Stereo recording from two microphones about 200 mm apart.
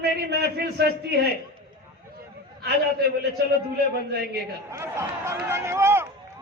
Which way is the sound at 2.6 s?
55° right (ahead or behind).